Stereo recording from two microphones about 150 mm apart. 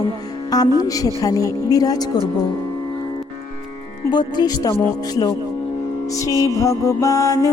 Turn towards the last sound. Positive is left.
turn(degrees=20)  # may be behind; listen again after turning